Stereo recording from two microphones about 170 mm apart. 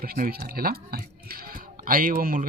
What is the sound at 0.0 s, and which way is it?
Speech, 60° right (ahead or behind).